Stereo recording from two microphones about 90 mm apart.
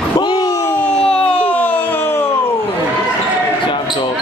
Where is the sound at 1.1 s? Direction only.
15° left (ahead or behind).